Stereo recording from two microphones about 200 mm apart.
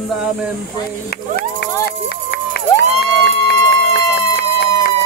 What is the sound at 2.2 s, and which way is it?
Crowd, 55° left (ahead or behind).